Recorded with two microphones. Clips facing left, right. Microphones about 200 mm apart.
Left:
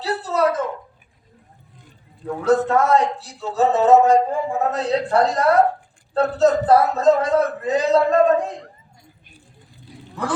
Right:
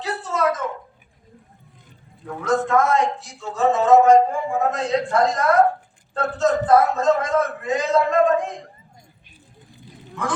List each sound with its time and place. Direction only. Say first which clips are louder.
0.0 s a sound: left 3 dB; 35° left (ahead or behind)
2.2 s a man's voice: left 4 dB; 35° left (ahead or behind)
10.2 s a man's voice: left 1 dB; 35° left (ahead or behind)